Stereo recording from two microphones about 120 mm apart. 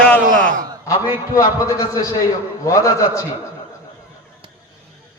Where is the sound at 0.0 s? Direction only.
10° left (ahead or behind).